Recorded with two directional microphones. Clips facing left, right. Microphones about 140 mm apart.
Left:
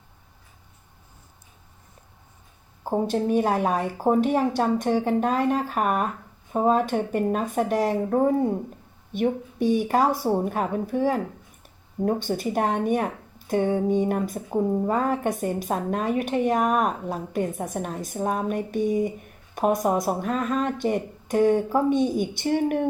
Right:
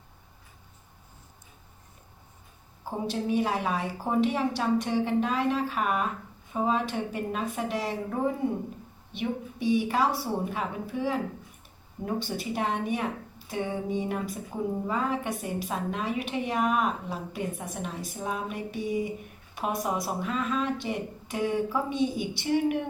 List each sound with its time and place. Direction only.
3.1 s speech: 50° left (ahead or behind)